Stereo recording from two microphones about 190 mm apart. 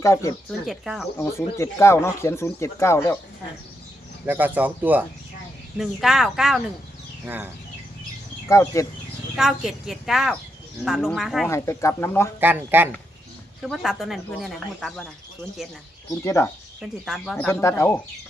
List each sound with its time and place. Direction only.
0.0 s speech: 15° left (ahead or behind)
0.6 s speech: centre (ahead or behind)
1.2 s speech: 15° left (ahead or behind)
4.3 s speech: 10° right (ahead or behind)
8.4 s speech: 15° left (ahead or behind)
9.3 s speech: centre (ahead or behind)
11.4 s speech: 15° left (ahead or behind)
12.4 s speech: 10° right (ahead or behind)
16.2 s speech: 15° left (ahead or behind)
16.8 s speech: centre (ahead or behind)
17.4 s speech: 15° left (ahead or behind)